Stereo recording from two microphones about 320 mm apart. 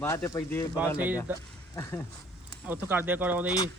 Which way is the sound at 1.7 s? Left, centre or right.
Centre.